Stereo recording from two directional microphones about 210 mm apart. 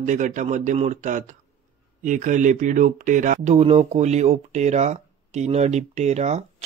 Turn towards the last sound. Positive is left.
turn(degrees=-30)  # may be behind; listen again after turning